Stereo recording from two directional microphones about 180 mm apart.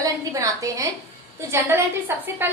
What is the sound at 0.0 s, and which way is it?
A woman's voice, 20° right (ahead or behind).